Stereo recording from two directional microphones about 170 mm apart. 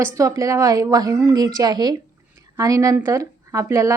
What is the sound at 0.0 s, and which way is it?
A woman's voice, 20° right (ahead or behind).